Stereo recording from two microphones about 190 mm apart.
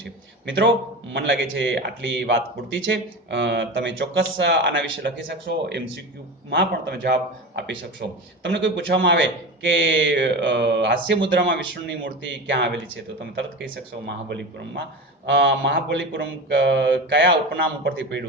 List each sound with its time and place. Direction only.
0.0 s a sound: 70° right (ahead or behind)
1.1 s a man's voice: 70° right (ahead or behind)
8.4 s a man's voice: 70° right (ahead or behind)
15.3 s a man's voice: 65° right (ahead or behind)